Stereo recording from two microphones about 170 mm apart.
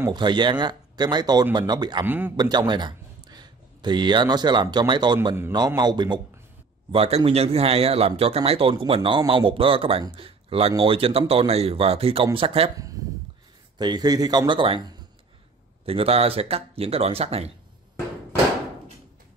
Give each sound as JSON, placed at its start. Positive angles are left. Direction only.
{"t": 0.1, "sound": "speech", "side_deg": -25}
{"t": 2.0, "sound": "a man's voice", "side_deg": -10}
{"t": 2.3, "sound": "a man's voice", "side_deg": -25}
{"t": 13.0, "sound": "a sound", "side_deg": -20}
{"t": 13.7, "sound": "a man's voice", "side_deg": -25}